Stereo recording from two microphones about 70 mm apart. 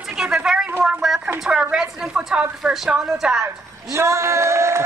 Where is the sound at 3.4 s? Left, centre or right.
Right.